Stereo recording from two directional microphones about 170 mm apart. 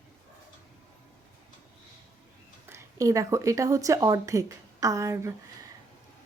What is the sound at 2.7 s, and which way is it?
A woman's voice, 15° right (ahead or behind).